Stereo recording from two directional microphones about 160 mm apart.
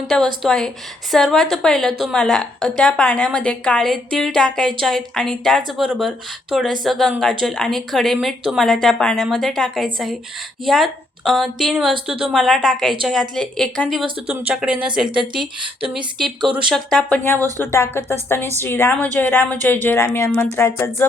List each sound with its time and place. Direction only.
0.1 s a woman's voice: 5° left (ahead or behind)
15.4 s speech: 30° right (ahead or behind)
16.5 s a woman's voice: 5° right (ahead or behind)
17.6 s speech: 15° left (ahead or behind)